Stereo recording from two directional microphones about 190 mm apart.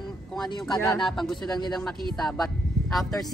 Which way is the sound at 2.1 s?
Centre (ahead or behind).